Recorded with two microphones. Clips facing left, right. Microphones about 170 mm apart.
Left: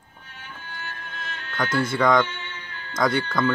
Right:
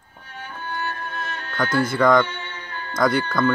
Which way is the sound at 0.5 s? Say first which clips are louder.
Right 10 dB; 50° right (ahead or behind).